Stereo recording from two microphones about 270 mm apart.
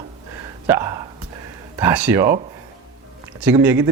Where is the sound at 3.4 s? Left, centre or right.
Centre.